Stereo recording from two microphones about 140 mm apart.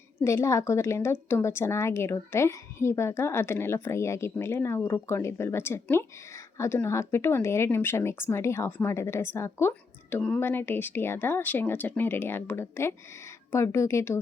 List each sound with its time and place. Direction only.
0.3 s a woman's voice: 20° left (ahead or behind)